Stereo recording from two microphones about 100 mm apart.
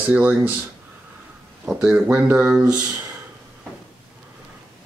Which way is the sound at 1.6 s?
10° right (ahead or behind).